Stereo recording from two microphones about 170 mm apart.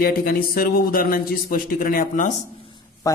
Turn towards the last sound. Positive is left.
turn(degrees=25)  # may be behind; listen again after turning